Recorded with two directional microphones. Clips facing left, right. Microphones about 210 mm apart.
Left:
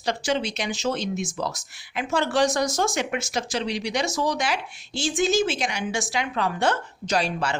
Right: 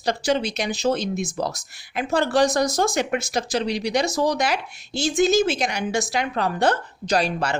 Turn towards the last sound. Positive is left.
turn(degrees=-40)  # may be behind; listen again after turning